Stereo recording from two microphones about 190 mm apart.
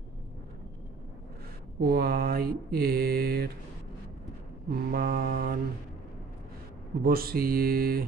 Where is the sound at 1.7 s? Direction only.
55° right (ahead or behind).